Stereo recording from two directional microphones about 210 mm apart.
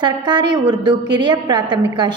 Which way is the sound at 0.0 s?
20° right (ahead or behind).